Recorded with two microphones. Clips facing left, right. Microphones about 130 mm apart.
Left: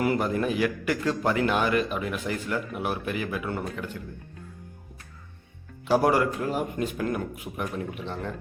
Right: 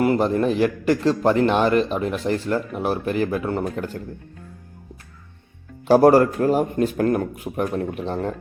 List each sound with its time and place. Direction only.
0.0 s a man's voice: 25° right (ahead or behind)
5.9 s a man's voice: 40° right (ahead or behind)